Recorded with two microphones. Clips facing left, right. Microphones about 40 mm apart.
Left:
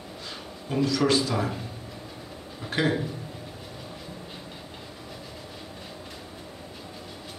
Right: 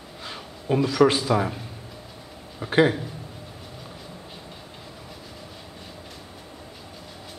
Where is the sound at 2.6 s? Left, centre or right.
Right.